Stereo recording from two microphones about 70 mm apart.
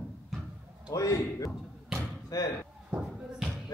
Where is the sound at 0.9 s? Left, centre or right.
Left.